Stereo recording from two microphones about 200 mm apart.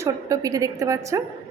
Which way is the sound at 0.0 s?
15° right (ahead or behind).